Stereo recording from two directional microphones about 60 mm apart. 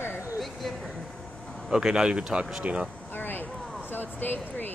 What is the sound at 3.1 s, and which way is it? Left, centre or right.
Vehicle, left.